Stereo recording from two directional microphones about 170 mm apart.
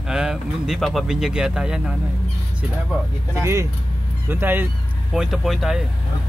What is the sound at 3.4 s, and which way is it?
Speech, 15° right (ahead or behind).